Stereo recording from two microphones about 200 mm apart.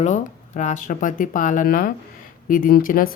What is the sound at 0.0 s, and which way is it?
Speech, 35° left (ahead or behind).